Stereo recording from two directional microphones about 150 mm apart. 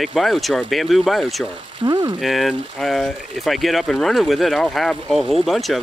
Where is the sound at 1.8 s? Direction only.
30° right (ahead or behind).